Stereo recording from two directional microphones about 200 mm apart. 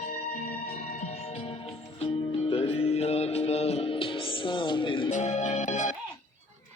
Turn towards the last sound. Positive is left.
turn(degrees=35)  # may be behind; listen again after turning